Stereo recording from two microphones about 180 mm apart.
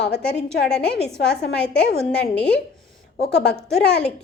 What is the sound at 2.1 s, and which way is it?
A woman's voice, 75° left (ahead or behind).